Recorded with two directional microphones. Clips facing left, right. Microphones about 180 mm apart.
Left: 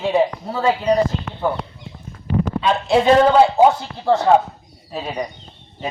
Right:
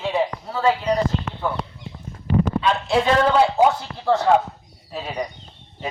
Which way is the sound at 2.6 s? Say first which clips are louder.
Left 4 dB; 25° left (ahead or behind).